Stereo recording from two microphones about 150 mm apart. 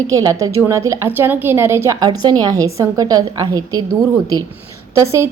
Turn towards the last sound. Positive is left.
turn(degrees=-20)  # may be behind; listen again after turning